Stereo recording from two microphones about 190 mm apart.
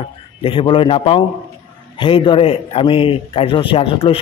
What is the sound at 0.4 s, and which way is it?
A man's voice, 25° left (ahead or behind).